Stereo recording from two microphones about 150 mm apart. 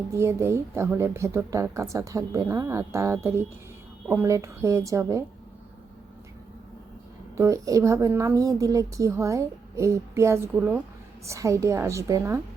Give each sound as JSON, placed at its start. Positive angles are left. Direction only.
{"t": 0.1, "sound": "a woman's voice", "side_deg": -20}
{"t": 7.3, "sound": "a woman's voice", "side_deg": -20}